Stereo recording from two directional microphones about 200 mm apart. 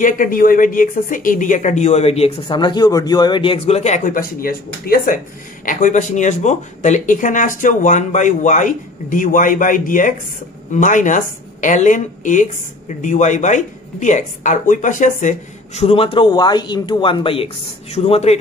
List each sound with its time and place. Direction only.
0.0 s speech: 45° left (ahead or behind)